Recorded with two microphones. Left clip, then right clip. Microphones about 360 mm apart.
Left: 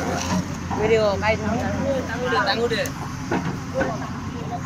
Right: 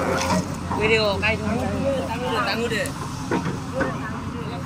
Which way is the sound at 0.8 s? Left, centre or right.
Centre.